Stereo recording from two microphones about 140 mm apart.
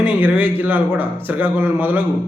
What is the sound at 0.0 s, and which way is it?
A man's voice, 15° right (ahead or behind).